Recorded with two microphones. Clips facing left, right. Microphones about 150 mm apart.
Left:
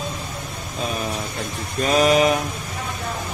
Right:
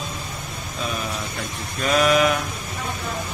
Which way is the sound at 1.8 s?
35° left (ahead or behind).